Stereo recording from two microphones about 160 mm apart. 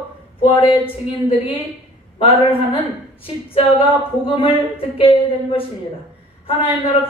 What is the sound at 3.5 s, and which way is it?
Speech, 35° left (ahead or behind).